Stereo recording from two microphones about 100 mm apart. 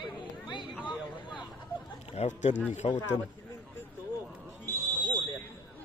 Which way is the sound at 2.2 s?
90° left.